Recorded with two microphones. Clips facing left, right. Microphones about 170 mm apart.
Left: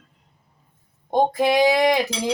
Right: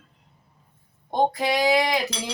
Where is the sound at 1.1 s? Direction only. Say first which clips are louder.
Left 4 dB; 50° left (ahead or behind).